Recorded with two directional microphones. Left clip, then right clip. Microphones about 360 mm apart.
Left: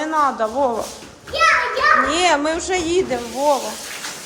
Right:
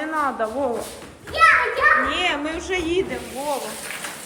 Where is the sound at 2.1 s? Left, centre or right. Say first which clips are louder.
Left 6 dB; left.